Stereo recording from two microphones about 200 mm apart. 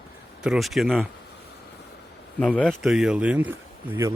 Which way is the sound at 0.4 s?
Centre (ahead or behind).